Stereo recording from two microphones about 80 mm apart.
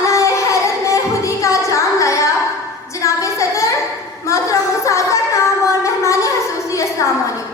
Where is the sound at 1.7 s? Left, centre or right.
Left.